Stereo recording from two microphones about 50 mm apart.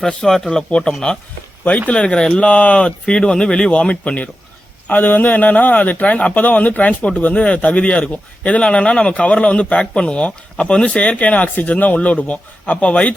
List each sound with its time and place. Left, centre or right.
0.1 s speech: centre
4.9 s a man's voice: left